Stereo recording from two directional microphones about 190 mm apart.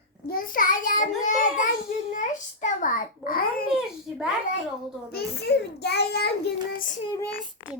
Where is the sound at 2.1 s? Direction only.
40° left (ahead or behind).